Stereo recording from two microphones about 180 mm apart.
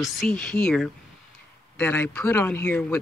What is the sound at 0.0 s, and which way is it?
Speech, centre (ahead or behind).